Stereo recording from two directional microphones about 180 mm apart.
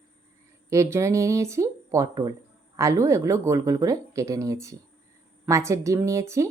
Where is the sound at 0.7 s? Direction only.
15° right (ahead or behind).